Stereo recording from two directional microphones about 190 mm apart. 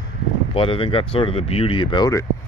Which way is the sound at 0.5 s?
30° left (ahead or behind).